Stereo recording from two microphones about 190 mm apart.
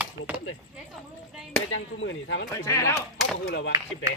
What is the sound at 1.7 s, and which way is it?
Speech, 90° left.